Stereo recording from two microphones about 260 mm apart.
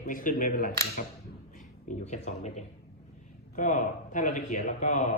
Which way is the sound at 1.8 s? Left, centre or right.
Left.